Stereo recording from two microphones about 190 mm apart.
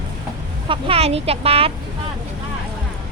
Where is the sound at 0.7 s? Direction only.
30° right (ahead or behind).